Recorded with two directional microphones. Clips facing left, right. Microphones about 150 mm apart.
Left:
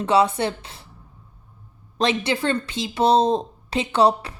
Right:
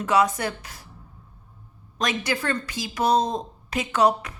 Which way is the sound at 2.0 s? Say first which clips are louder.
Left 5 dB; 25° left (ahead or behind).